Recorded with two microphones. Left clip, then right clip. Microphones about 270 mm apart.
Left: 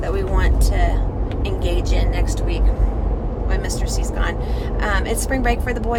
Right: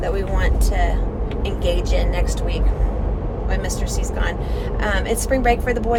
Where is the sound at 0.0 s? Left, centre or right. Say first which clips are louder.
Even; centre.